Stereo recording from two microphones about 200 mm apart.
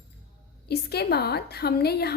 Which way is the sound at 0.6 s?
55° left (ahead or behind).